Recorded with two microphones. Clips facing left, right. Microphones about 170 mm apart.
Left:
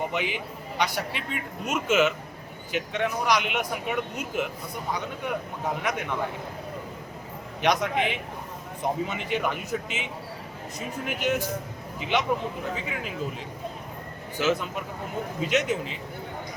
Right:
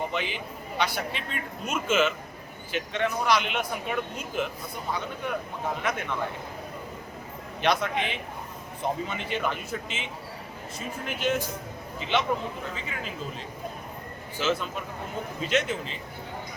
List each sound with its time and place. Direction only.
0.1 s a man's voice: 15° left (ahead or behind)
7.6 s a man's voice: 15° left (ahead or behind)
14.3 s a man's voice: 15° left (ahead or behind)